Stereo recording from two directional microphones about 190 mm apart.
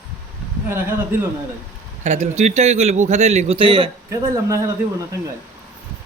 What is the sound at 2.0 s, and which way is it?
A man's voice, 35° right (ahead or behind).